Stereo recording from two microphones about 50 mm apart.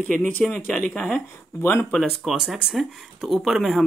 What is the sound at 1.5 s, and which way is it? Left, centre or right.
Speech, left.